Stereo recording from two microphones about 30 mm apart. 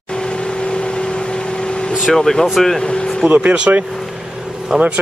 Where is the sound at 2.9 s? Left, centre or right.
Left.